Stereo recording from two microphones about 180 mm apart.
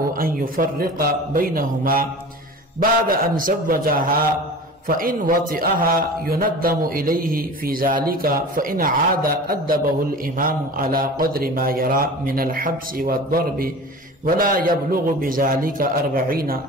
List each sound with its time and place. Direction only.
0.2 s a man's voice: 55° right (ahead or behind)